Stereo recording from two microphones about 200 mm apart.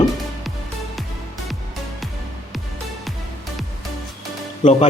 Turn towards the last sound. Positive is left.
turn(degrees=35)  # may be behind; listen again after turning